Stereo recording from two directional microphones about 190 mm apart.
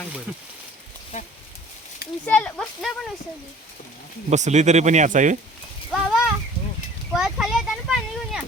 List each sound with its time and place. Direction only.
2.2 s speech: 5° left (ahead or behind)
4.3 s speech: 35° right (ahead or behind)
5.9 s a sound: centre (ahead or behind)